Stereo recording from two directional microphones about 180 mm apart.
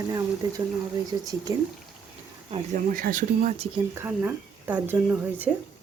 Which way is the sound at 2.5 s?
35° right (ahead or behind).